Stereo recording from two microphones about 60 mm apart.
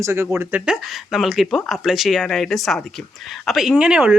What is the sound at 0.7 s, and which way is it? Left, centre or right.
Speech, centre.